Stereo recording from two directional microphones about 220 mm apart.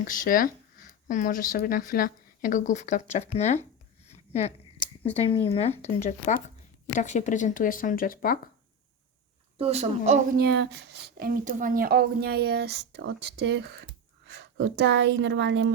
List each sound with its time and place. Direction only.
0.1 s speech: 40° left (ahead or behind)
4.1 s a sound: 30° left (ahead or behind)
5.1 s speech: 25° left (ahead or behind)
9.6 s a woman's voice: 30° right (ahead or behind)
10.3 s a woman's voice: 45° right (ahead or behind)